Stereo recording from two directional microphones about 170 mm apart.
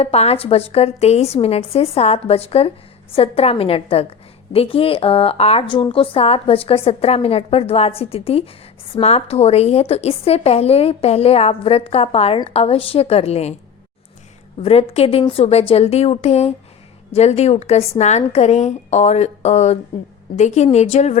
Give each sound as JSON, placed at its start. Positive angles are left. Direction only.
{"t": 0.0, "sound": "a woman's voice", "side_deg": 35}
{"t": 14.6, "sound": "a woman's voice", "side_deg": 35}